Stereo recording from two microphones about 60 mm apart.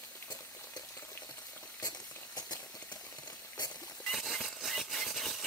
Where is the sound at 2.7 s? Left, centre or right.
Left.